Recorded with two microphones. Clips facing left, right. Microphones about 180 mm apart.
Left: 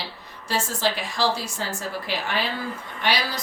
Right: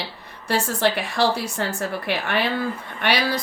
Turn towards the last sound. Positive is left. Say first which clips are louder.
# right 3 dB
turn(degrees=-60)  # may be behind; listen again after turning